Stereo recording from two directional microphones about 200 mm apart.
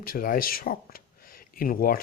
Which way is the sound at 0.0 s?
45° left (ahead or behind).